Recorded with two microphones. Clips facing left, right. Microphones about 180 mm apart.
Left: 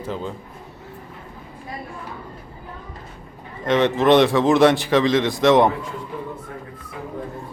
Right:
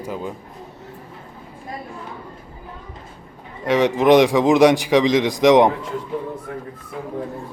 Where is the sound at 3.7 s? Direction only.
10° right (ahead or behind).